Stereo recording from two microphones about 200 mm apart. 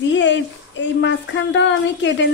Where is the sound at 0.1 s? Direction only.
65° left (ahead or behind).